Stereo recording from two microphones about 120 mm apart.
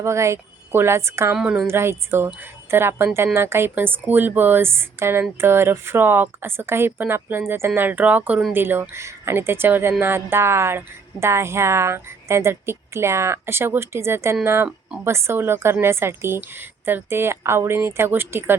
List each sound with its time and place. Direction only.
0.0 s speech: 25° right (ahead or behind)
1.4 s speech: 5° right (ahead or behind)
1.6 s speech: 20° right (ahead or behind)